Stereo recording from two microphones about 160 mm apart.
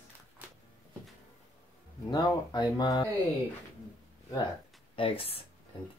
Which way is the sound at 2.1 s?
25° left (ahead or behind).